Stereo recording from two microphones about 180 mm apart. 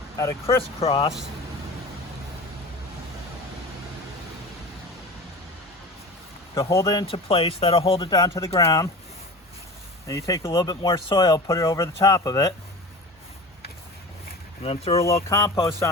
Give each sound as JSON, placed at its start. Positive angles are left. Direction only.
{"t": 0.2, "sound": "speech", "side_deg": 15}
{"t": 0.8, "sound": "speech", "side_deg": 30}
{"t": 6.5, "sound": "speech", "side_deg": 15}
{"t": 7.0, "sound": "speech", "side_deg": 30}
{"t": 10.1, "sound": "speech", "side_deg": 20}
{"t": 14.6, "sound": "speech", "side_deg": 35}
{"t": 15.0, "sound": "speech", "side_deg": 15}